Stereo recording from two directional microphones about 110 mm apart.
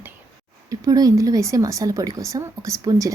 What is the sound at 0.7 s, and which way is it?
Speech, 35° right (ahead or behind).